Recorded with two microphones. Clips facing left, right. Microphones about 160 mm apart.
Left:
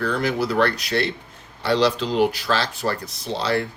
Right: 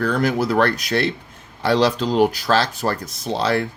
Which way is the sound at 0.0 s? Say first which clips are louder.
Right 3 dB; 45° right (ahead or behind).